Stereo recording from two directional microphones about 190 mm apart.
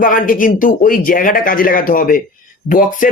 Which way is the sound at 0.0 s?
45° left (ahead or behind).